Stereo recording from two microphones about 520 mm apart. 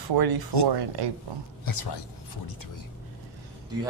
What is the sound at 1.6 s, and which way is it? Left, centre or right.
Speech, left.